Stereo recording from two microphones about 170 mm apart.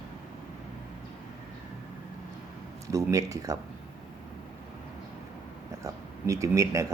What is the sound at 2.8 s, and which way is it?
Speech, 20° right (ahead or behind).